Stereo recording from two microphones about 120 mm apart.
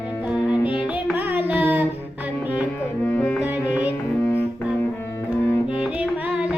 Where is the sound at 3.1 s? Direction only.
15° left (ahead or behind).